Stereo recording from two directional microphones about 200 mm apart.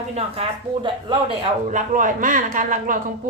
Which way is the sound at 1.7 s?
40° right (ahead or behind).